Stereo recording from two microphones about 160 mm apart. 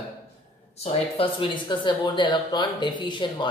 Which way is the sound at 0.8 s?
35° left (ahead or behind).